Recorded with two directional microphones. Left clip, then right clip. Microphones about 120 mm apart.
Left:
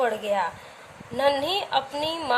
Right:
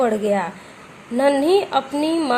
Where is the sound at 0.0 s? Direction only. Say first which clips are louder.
Right 5 dB; 40° right (ahead or behind).